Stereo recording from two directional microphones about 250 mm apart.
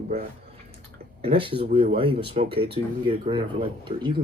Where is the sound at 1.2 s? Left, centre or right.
Right.